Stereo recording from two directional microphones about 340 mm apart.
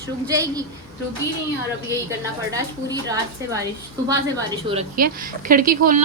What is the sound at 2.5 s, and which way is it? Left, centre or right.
A woman's voice, centre.